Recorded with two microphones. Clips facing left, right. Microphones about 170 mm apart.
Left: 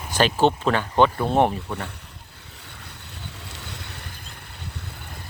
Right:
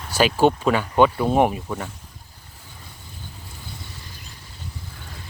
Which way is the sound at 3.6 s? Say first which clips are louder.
Right 1 dB; 75° left (ahead or behind).